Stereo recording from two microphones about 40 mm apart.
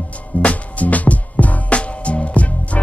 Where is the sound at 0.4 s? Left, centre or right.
Left.